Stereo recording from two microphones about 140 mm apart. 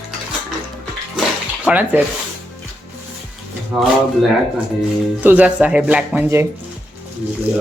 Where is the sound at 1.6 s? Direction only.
10° right (ahead or behind).